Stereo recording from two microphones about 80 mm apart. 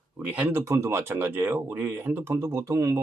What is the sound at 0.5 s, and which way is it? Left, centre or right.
Speech, right.